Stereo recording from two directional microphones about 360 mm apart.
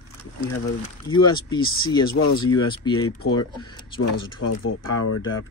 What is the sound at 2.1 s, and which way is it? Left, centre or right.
Speech, left.